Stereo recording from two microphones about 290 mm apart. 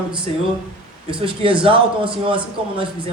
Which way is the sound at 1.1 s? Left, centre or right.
Centre.